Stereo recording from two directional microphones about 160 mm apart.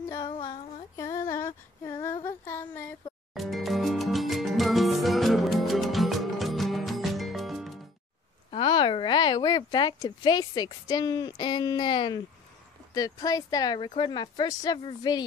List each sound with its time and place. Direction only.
0.1 s a sound: 25° left (ahead or behind)
0.9 s female singing: 20° left (ahead or behind)
2.2 s child singing: 15° left (ahead or behind)
3.3 s salsa music: centre (ahead or behind)
8.5 s a sound: 30° left (ahead or behind)
12.9 s speech: 25° left (ahead or behind)